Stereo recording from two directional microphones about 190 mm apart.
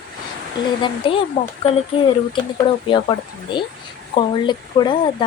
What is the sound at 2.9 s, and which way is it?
Speech, 25° left (ahead or behind).